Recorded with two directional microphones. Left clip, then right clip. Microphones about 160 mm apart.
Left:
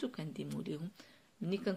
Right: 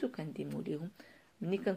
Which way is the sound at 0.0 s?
25° left (ahead or behind).